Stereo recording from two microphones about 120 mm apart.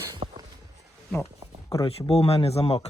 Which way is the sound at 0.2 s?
60° right (ahead or behind).